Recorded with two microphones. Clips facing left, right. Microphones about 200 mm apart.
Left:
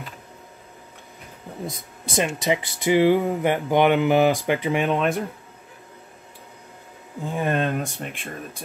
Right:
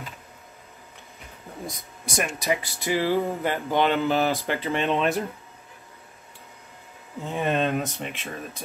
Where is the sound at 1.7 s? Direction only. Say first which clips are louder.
Left 2 dB; 25° left (ahead or behind).